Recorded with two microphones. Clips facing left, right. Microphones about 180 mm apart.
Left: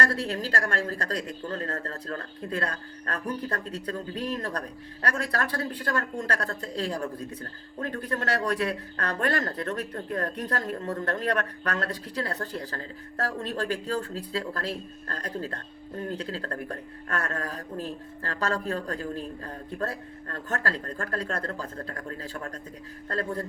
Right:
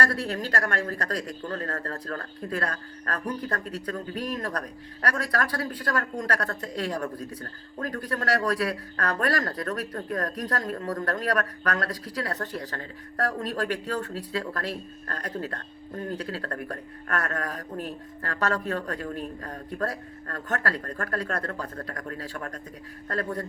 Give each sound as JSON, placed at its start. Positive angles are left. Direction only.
{"t": 0.0, "sound": "speech", "side_deg": 25}